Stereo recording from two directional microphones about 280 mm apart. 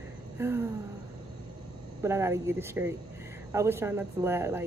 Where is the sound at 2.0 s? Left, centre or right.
Centre.